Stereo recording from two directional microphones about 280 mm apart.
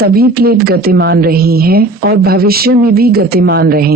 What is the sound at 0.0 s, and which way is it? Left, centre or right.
Speech, right.